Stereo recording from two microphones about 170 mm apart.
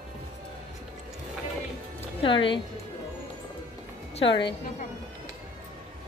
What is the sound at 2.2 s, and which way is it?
Speech, 30° left (ahead or behind).